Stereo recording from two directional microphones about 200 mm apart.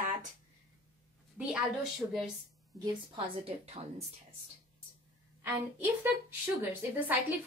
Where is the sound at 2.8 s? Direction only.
25° right (ahead or behind).